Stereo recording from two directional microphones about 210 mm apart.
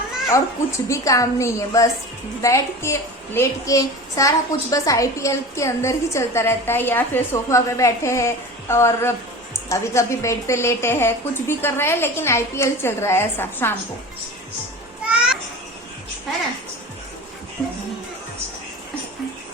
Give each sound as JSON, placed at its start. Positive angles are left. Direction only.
{"t": 0.9, "sound": "a woman's voice", "side_deg": 15}
{"t": 15.1, "sound": "a sound", "side_deg": -5}
{"t": 17.6, "sound": "music", "side_deg": -5}